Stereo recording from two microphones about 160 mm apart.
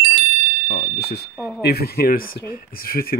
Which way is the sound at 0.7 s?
80° left.